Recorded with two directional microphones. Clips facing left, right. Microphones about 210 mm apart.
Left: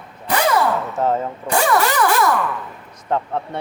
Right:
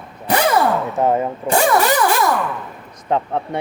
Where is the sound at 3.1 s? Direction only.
15° right (ahead or behind).